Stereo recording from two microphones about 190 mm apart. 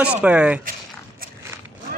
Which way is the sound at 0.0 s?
5° right (ahead or behind).